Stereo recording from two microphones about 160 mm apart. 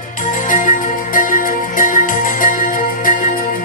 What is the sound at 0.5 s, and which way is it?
Music, 55° left (ahead or behind).